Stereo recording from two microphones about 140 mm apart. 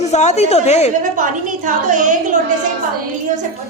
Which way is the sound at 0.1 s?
55° left (ahead or behind).